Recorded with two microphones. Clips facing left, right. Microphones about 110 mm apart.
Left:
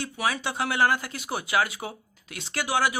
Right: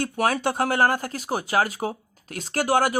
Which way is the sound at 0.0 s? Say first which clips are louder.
Right 6 dB; 50° right (ahead or behind).